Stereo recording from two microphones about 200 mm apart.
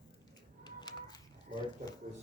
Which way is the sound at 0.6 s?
20° left (ahead or behind).